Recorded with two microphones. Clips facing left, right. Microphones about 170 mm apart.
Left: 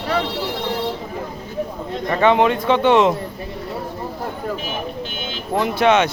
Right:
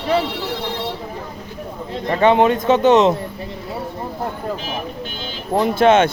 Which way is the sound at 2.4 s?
45° right (ahead or behind).